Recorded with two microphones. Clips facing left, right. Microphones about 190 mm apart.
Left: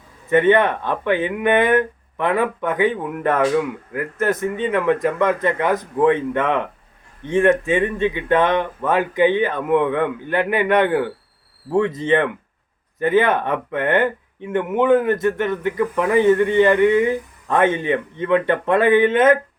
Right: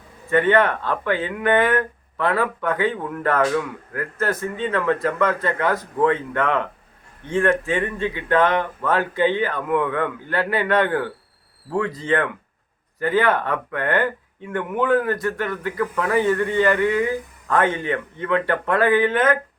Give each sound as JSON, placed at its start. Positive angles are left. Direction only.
{"t": 0.3, "sound": "speech", "side_deg": 20}